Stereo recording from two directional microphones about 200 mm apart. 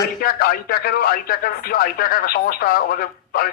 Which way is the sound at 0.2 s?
45° left (ahead or behind).